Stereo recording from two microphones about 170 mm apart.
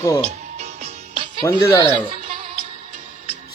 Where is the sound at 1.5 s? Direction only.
15° left (ahead or behind).